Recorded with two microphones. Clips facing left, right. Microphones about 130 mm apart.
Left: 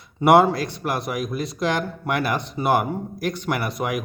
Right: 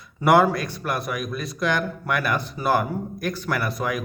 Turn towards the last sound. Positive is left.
turn(degrees=25)  # may be behind; listen again after turning